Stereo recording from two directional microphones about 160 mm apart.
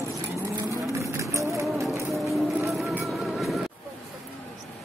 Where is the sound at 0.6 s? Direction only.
20° right (ahead or behind).